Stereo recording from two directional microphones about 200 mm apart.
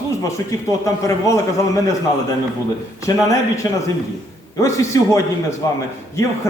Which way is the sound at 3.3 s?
15° left (ahead or behind).